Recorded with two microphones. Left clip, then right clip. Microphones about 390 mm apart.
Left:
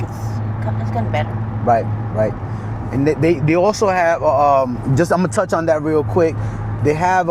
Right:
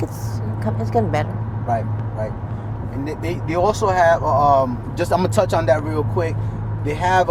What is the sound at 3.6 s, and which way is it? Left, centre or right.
Speech, left.